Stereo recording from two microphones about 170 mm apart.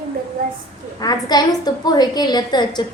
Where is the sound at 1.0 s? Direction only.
25° left (ahead or behind).